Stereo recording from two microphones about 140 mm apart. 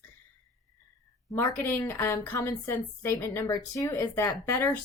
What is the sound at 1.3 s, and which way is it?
A woman's voice, 20° left (ahead or behind).